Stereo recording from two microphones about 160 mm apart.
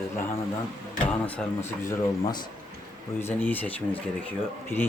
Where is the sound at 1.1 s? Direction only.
10° left (ahead or behind).